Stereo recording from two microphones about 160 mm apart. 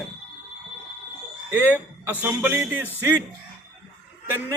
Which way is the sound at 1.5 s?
10° right (ahead or behind).